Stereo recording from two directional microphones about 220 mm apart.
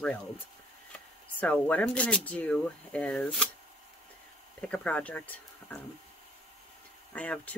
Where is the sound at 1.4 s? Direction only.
5° left (ahead or behind).